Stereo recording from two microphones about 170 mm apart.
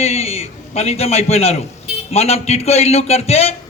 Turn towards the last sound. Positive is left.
turn(degrees=40)  # may be behind; listen again after turning